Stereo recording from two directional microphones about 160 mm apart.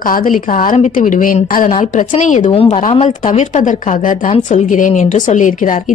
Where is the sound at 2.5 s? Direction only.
40° left (ahead or behind).